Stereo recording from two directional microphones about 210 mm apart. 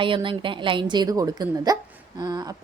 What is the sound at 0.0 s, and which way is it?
A woman's voice, 25° right (ahead or behind).